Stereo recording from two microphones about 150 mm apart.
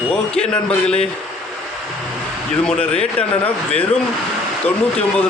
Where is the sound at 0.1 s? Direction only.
5° left (ahead or behind).